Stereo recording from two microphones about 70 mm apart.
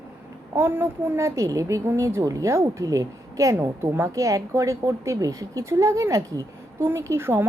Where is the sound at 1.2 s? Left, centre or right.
Right.